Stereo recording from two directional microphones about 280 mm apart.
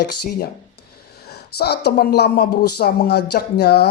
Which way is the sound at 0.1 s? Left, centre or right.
Left.